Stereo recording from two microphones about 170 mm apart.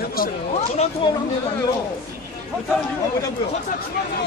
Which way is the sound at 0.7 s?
40° left (ahead or behind).